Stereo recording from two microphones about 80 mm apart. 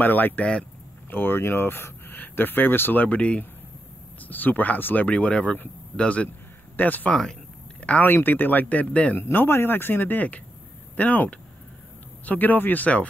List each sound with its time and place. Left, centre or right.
0.0 s a man's voice: left